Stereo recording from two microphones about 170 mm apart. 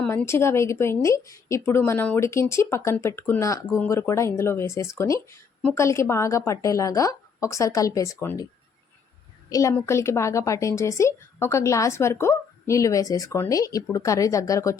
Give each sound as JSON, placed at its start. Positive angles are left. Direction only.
{"t": 0.1, "sound": "a woman's voice", "side_deg": 15}
{"t": 9.5, "sound": "a woman's voice", "side_deg": 20}